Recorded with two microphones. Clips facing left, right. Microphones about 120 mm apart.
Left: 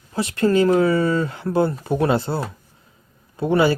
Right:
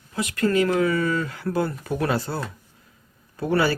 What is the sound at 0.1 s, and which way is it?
Speech, 30° left (ahead or behind).